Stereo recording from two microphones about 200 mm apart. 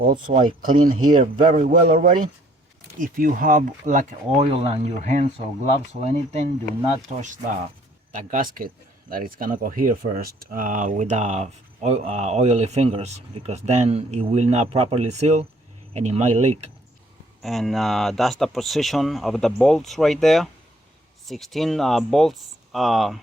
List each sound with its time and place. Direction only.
0.0 s speech: 45° right (ahead or behind)
17.4 s speech: centre (ahead or behind)